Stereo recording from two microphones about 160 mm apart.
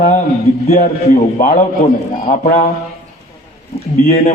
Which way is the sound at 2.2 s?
55° left (ahead or behind).